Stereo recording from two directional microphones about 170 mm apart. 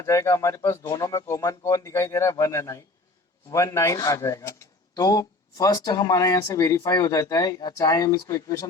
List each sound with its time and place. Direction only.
0.0 s speech: 15° left (ahead or behind)